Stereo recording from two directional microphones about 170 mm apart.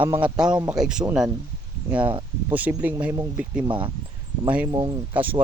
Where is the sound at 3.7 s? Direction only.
30° right (ahead or behind).